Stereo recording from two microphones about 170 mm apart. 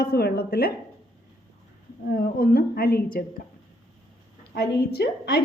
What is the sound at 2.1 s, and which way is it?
Speech, 60° left (ahead or behind).